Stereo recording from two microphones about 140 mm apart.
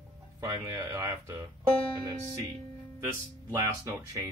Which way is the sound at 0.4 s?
25° right (ahead or behind).